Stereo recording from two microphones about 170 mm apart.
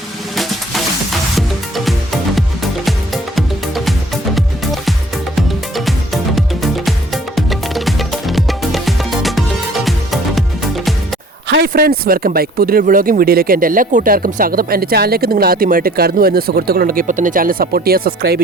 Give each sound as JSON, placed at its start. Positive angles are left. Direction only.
{"t": 0.3, "sound": "music", "side_deg": 0}
{"t": 3.8, "sound": "music", "side_deg": 0}
{"t": 11.4, "sound": "speech", "side_deg": -75}